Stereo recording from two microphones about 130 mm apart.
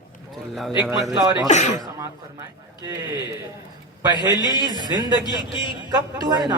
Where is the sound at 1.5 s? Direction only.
65° left (ahead or behind).